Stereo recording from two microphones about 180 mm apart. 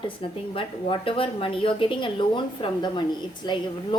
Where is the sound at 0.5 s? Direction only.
30° left (ahead or behind).